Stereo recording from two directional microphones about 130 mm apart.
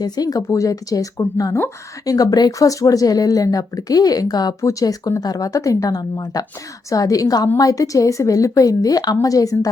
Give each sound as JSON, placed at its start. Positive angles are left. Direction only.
{"t": 0.0, "sound": "speech", "side_deg": 30}